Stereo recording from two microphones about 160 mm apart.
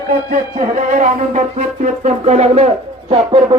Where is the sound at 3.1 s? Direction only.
35° right (ahead or behind).